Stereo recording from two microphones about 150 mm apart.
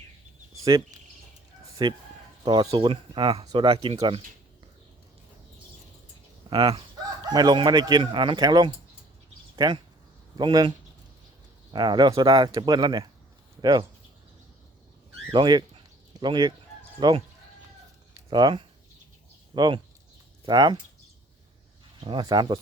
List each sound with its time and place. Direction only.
0.6 s speech: 25° right (ahead or behind)
6.5 s speech: 35° right (ahead or behind)
15.3 s speech: 30° right (ahead or behind)
18.3 s speech: 30° right (ahead or behind)
22.0 s speech: 30° right (ahead or behind)